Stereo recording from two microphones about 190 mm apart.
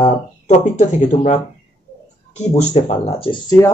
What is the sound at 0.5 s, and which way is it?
Speech, 40° left (ahead or behind).